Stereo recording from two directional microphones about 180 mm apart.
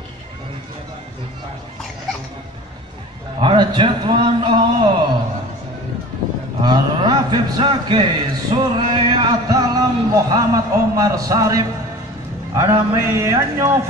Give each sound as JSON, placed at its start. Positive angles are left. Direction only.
{"t": 3.3, "sound": "a man's voice", "side_deg": -30}
{"t": 6.6, "sound": "a sound", "side_deg": -25}
{"t": 12.5, "sound": "a man's voice", "side_deg": -15}